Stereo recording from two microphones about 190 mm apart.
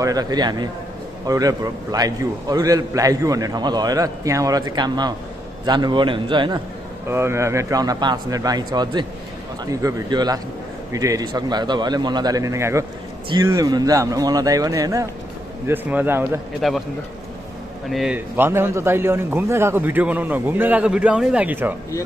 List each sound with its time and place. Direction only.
0.0 s a man's voice: 20° right (ahead or behind)
7.1 s a man's voice: 15° right (ahead or behind)
16.6 s speech: centre (ahead or behind)
17.8 s a man's voice: centre (ahead or behind)